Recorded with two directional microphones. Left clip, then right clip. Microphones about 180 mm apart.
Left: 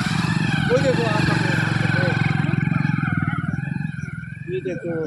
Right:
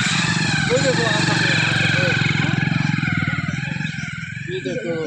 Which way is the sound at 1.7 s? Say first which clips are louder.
Right 4 dB; 25° left (ahead or behind).